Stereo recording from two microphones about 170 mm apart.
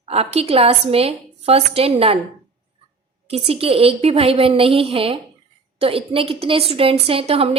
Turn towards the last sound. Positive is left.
turn(degrees=-35)  # may be behind; listen again after turning